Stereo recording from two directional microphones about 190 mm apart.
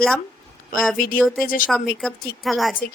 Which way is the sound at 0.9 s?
50° left (ahead or behind).